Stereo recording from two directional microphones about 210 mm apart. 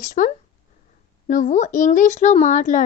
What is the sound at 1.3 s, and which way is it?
A woman's voice, 35° left (ahead or behind).